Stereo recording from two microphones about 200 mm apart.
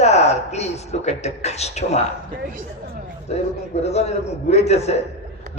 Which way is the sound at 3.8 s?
30° left (ahead or behind).